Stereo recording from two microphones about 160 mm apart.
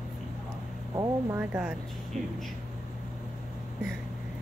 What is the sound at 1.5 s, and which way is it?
Speech, 5° right (ahead or behind).